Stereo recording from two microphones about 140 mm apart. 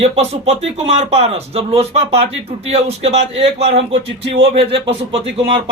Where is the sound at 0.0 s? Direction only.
50° right (ahead or behind).